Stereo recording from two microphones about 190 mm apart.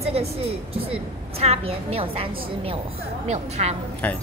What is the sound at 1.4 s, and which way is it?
A woman's voice, 30° right (ahead or behind).